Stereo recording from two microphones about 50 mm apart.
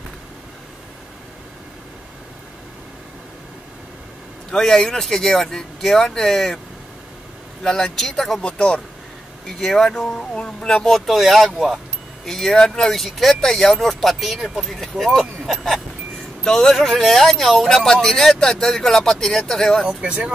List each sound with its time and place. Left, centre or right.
4.5 s speech: centre
7.6 s speech: centre
8.4 s speech: left
9.6 s speech: centre
11.0 s speech: centre
14.7 s speech: centre
20.0 s speech: right